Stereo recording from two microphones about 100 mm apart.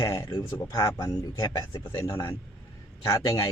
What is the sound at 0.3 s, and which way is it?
Speech, 45° left (ahead or behind).